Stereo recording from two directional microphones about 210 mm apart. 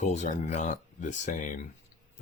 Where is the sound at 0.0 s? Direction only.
35° left (ahead or behind).